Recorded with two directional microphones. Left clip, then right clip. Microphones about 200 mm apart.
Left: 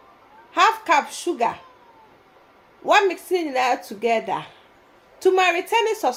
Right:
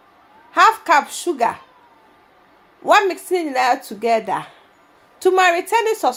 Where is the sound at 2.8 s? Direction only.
25° right (ahead or behind).